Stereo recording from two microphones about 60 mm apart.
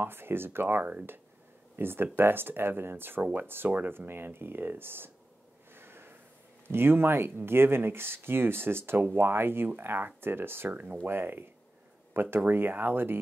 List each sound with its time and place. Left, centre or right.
0.0 s speech: right
5.7 s snort: right
6.7 s speech: right
10.7 s speech: right
11.1 s speech: right